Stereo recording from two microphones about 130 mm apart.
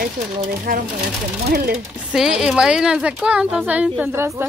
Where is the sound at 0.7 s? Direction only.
90° right.